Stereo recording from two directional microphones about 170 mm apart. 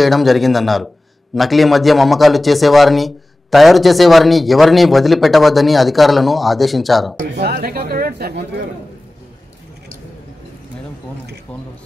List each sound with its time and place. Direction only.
0.0 s a man's voice: centre (ahead or behind)
7.3 s speech: 70° right (ahead or behind)